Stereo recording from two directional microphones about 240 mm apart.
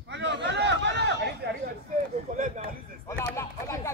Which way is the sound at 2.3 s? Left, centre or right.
Right.